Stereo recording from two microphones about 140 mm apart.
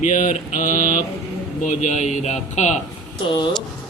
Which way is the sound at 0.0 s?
65° left (ahead or behind).